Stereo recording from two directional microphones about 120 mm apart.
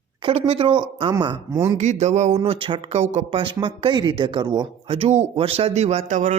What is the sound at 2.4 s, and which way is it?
Speech, 45° right (ahead or behind).